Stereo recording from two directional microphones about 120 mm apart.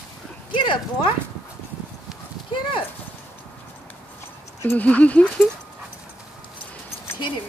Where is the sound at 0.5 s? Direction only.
40° left (ahead or behind).